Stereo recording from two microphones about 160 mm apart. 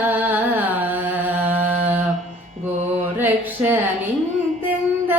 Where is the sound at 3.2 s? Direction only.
10° right (ahead or behind).